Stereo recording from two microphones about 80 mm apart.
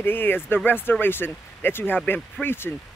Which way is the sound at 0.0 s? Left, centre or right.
Left.